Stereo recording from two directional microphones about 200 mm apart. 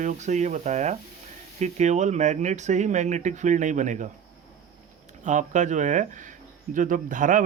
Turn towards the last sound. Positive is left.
turn(degrees=-40)  # may be behind; listen again after turning